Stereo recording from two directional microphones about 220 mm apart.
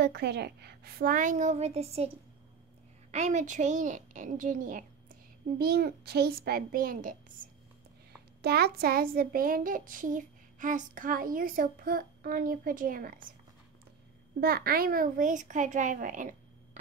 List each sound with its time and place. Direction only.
0.0 s a child's voice: 50° right (ahead or behind); by 2.0 s 30° right (ahead or behind)
3.1 s a child's voice: 30° right (ahead or behind)
14.4 s a child's voice: 45° right (ahead or behind)